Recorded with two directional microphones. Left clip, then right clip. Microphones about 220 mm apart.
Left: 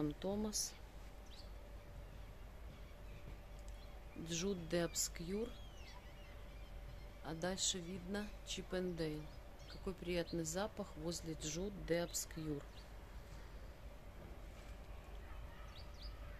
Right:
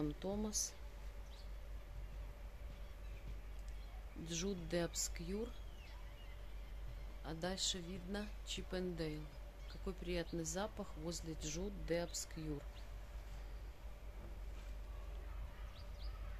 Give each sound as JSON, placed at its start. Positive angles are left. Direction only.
{"t": 0.0, "sound": "a woman's voice", "side_deg": 5}
{"t": 4.3, "sound": "speech", "side_deg": 5}
{"t": 7.2, "sound": "a woman's voice", "side_deg": 0}